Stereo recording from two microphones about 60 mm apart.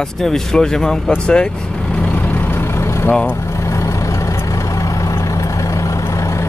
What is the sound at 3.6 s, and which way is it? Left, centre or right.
Vehicle, left.